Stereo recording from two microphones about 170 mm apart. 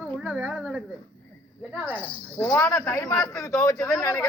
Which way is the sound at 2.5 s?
10° left (ahead or behind).